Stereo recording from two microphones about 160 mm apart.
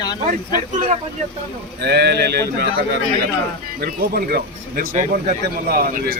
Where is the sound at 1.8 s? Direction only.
90° right.